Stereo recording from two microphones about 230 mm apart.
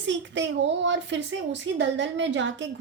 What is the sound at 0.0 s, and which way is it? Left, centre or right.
A woman's voice, right.